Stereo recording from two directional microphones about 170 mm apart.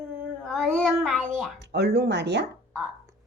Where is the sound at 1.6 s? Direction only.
75° right (ahead or behind).